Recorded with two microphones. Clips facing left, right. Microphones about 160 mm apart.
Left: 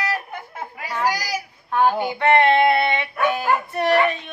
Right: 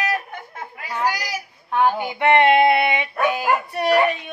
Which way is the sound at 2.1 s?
15° right (ahead or behind).